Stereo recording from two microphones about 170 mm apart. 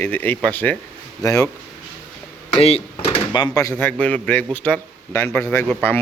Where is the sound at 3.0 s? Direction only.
25° left (ahead or behind).